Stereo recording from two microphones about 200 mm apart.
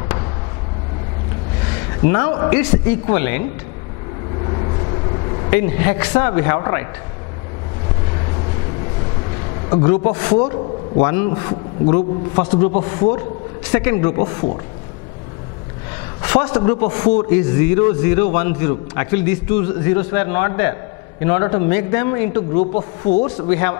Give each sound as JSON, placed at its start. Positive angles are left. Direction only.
{"t": 1.7, "sound": "a man's voice", "side_deg": 15}
{"t": 4.5, "sound": "a sound", "side_deg": 25}
{"t": 9.8, "sound": "a man's voice", "side_deg": 15}
{"t": 13.7, "sound": "a man's voice", "side_deg": 15}
{"t": 16.2, "sound": "a man's voice", "side_deg": 20}
{"t": 22.5, "sound": "a man's voice", "side_deg": 40}
{"t": 23.5, "sound": "a man's voice", "side_deg": 15}